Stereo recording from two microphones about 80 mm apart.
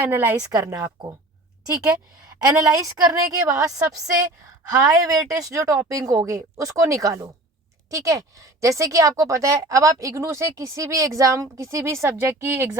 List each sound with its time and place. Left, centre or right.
0.0 s a woman's voice: right
1.7 s a woman's voice: centre
2.6 s a woman's voice: right